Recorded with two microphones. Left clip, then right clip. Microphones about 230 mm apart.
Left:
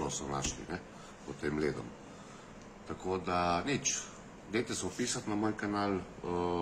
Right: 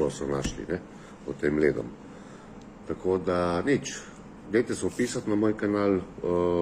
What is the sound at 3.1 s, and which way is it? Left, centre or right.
Speech, centre.